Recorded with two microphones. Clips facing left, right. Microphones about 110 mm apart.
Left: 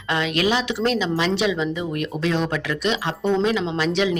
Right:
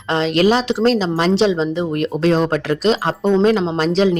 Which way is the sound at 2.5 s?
50° right (ahead or behind).